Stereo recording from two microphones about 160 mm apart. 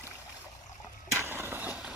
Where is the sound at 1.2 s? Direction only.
15° right (ahead or behind).